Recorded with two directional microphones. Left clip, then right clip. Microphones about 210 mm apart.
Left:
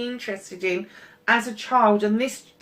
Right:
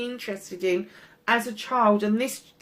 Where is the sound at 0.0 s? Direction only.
45° right (ahead or behind).